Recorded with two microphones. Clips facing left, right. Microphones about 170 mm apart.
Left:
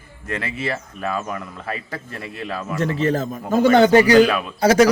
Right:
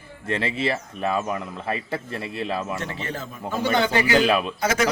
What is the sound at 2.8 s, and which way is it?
A man's voice, 40° left (ahead or behind).